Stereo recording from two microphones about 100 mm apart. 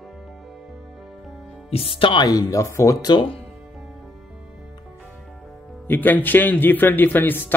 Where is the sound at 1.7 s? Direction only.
60° left (ahead or behind).